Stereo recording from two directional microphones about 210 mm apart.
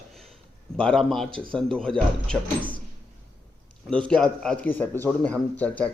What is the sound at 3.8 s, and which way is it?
Speech, 5° left (ahead or behind).